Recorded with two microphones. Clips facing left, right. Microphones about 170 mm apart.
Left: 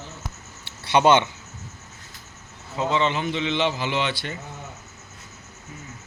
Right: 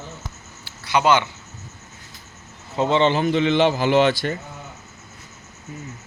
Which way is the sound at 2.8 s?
30° right (ahead or behind).